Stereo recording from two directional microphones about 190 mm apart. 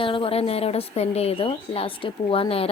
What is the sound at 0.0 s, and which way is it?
Speech, 30° left (ahead or behind).